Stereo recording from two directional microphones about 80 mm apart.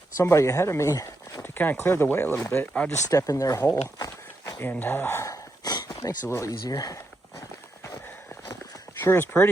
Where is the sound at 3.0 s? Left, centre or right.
Left.